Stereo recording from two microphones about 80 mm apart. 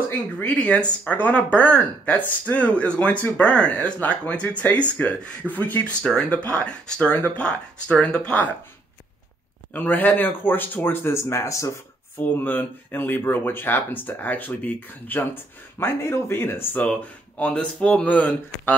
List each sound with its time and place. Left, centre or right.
0.5 s speech: centre
9.8 s speech: left
12.2 s speech: left